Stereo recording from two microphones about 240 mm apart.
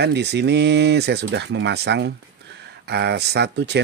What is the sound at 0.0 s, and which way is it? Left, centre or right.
Speech, right.